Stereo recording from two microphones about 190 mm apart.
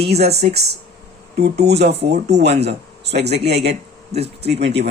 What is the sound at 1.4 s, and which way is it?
Speech, 60° right (ahead or behind).